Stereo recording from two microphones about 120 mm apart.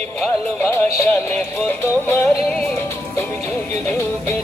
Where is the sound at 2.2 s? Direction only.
5° left (ahead or behind).